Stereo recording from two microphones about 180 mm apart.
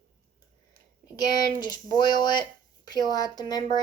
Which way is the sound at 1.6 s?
20° left (ahead or behind).